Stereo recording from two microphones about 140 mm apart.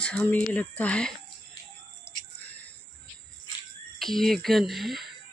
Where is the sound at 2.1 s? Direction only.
15° left (ahead or behind).